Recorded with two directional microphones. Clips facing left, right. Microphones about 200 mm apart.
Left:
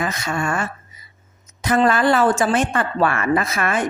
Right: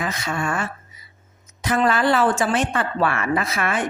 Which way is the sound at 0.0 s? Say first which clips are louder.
Left 2 dB; 45° left (ahead or behind).